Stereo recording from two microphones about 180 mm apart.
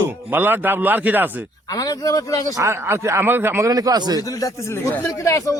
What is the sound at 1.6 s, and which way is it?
Speech, 20° left (ahead or behind).